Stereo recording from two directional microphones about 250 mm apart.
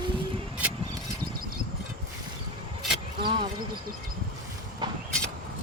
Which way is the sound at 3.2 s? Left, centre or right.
Right.